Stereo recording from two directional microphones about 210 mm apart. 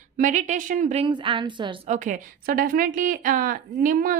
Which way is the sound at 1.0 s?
25° right (ahead or behind).